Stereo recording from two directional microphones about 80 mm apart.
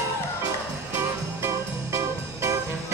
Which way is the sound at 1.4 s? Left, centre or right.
Right.